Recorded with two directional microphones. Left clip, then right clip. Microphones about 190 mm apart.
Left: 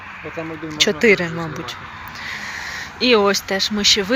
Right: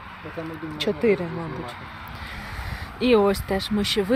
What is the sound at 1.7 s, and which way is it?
Speech, 10° right (ahead or behind).